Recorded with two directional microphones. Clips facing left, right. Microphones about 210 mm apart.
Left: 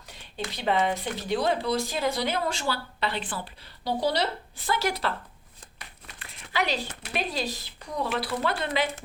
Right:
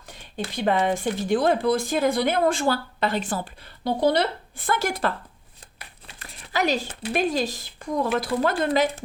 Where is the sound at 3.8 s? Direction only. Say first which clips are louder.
Right 5 dB; 55° right (ahead or behind).